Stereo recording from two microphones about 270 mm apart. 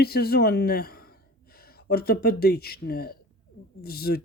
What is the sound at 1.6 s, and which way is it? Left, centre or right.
Speech, left.